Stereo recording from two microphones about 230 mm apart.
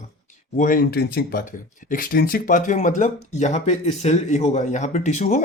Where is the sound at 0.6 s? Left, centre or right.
Left.